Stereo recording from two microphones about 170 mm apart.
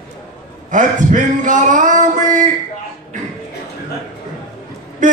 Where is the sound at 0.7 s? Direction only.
50° right (ahead or behind).